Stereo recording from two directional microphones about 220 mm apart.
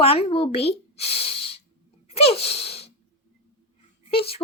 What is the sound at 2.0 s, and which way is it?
Sneeze, 25° left (ahead or behind).